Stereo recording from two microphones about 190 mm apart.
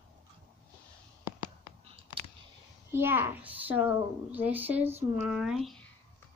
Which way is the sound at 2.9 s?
10° right (ahead or behind).